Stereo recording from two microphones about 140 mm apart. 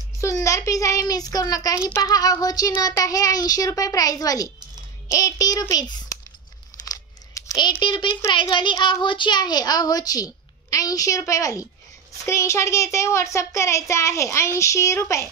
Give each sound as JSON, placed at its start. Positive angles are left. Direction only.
{"t": 0.2, "sound": "speech", "side_deg": 20}
{"t": 7.3, "sound": "a sound", "side_deg": 30}
{"t": 7.8, "sound": "a child's voice", "side_deg": 35}